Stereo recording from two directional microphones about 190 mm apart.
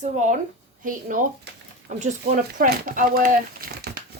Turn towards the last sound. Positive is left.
turn(degrees=-50)  # may be behind; listen again after turning